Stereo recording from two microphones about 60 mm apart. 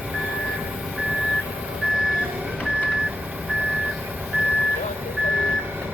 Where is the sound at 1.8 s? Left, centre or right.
Centre.